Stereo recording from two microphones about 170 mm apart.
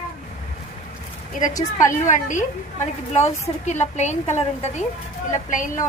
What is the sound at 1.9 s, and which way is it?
A woman's voice, 45° left (ahead or behind).